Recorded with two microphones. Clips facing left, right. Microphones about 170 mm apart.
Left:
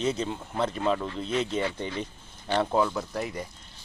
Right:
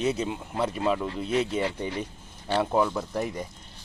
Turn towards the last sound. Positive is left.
turn(degrees=-15)  # may be behind; listen again after turning